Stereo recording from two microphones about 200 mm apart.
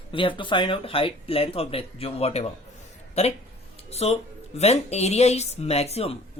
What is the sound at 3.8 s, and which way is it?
Speech, 30° left (ahead or behind).